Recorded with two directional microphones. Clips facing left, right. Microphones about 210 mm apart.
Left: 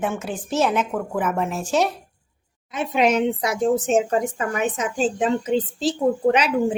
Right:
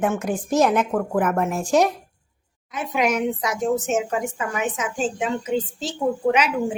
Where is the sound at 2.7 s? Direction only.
25° left (ahead or behind).